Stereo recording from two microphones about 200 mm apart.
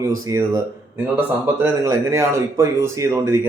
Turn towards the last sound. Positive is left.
turn(degrees=-15)  # may be behind; listen again after turning